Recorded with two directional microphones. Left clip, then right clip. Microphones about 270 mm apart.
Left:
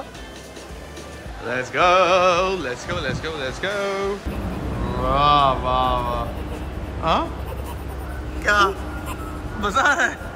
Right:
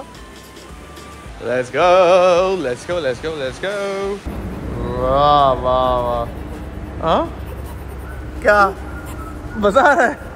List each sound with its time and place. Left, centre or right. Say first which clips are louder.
1.5 s speech: right 4 dB; centre
5.0 s mantra: right 4 dB; centre
8.4 s speech: right 5 dB; centre